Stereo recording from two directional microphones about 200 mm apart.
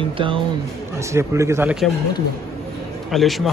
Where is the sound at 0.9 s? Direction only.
15° right (ahead or behind).